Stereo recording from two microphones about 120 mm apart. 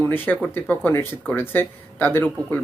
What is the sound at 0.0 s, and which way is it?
Speech, 15° left (ahead or behind).